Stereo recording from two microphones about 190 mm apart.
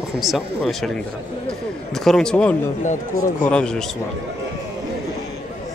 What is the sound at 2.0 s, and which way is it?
Speech, 5° left (ahead or behind).